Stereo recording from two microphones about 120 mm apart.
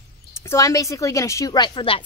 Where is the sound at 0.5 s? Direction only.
30° left (ahead or behind).